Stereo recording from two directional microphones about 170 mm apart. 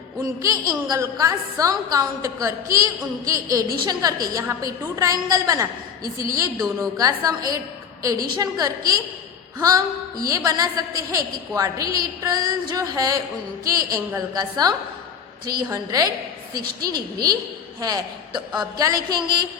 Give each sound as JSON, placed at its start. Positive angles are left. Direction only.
{"t": 0.4, "sound": "a woman's voice", "side_deg": -20}